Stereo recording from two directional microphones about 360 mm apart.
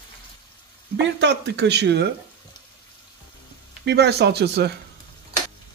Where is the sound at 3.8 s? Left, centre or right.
Right.